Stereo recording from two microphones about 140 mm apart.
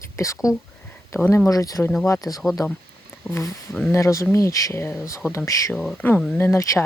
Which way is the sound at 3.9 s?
20° left (ahead or behind).